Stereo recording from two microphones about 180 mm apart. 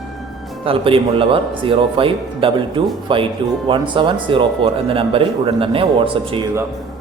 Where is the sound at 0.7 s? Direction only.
30° right (ahead or behind).